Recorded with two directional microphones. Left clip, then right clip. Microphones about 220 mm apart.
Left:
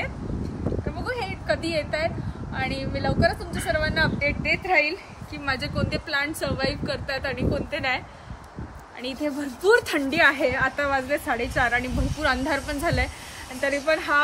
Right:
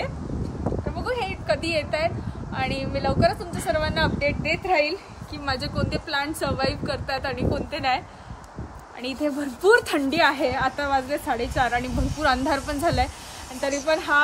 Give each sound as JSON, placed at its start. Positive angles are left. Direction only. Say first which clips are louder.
{"t": 0.8, "sound": "a sound", "louder": "right 4 dB", "side_deg": -15}
{"t": 2.6, "sound": "speech", "louder": "right 2 dB", "side_deg": -15}
{"t": 9.0, "sound": "speech", "louder": "right 2 dB", "side_deg": -20}